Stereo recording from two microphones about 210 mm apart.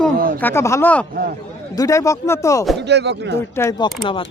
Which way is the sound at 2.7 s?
55° right (ahead or behind).